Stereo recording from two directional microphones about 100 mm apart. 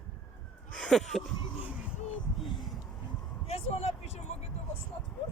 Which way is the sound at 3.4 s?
90° left.